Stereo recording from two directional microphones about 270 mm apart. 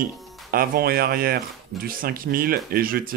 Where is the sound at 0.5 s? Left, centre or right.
Right.